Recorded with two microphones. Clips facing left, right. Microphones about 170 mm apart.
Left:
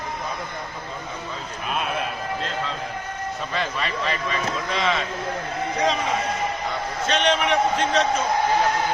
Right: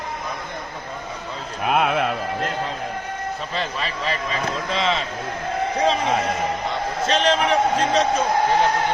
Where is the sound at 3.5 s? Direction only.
30° right (ahead or behind).